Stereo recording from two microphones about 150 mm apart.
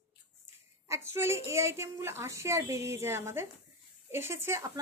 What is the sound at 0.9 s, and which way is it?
A woman's voice, 15° right (ahead or behind).